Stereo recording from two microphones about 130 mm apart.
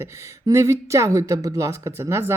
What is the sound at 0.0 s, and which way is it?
Speech, 20° right (ahead or behind).